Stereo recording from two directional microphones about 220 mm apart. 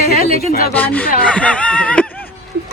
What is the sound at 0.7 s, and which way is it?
Speech, 5° left (ahead or behind).